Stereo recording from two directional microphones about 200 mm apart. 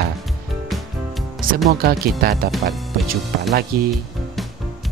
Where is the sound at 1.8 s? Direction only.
50° right (ahead or behind).